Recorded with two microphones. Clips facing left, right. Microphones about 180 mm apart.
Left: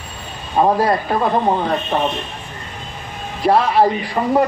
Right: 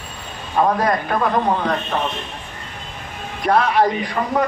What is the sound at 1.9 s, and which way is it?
Speech, 15° left (ahead or behind).